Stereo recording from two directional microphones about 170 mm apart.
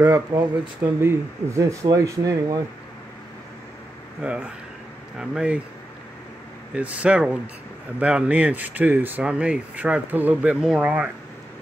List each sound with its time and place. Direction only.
0.0 s speech: 20° right (ahead or behind)
4.2 s speech: 10° right (ahead or behind)
6.7 s speech: 5° right (ahead or behind)